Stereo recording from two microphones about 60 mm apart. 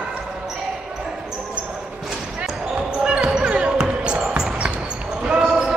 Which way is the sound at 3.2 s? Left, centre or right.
Centre.